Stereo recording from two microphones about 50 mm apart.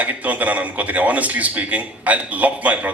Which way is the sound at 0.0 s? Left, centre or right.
Right.